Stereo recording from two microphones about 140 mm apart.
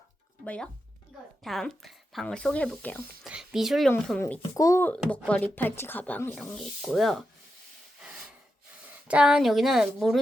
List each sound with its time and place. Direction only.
0.4 s a woman's voice: 10° left (ahead or behind)
3.2 s speech: 5° right (ahead or behind)
4.4 s a child's voice: 25° left (ahead or behind)
6.6 s speech: centre (ahead or behind)
9.0 s speech: 5° right (ahead or behind)